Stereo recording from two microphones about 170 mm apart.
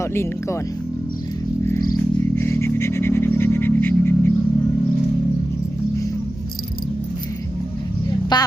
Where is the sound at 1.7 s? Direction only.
15° left (ahead or behind).